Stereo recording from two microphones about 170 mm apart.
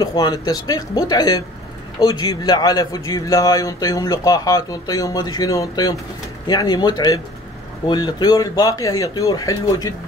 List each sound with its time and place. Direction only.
0.0 s a man's voice: 25° left (ahead or behind)